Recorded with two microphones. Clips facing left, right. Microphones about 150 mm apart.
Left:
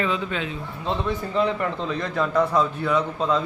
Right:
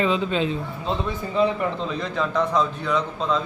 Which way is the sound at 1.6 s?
Centre (ahead or behind).